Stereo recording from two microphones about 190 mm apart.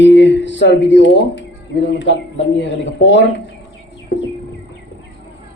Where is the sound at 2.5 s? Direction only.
70° left (ahead or behind).